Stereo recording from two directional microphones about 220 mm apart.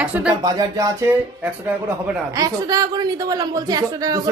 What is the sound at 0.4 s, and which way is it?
Speech, 15° right (ahead or behind).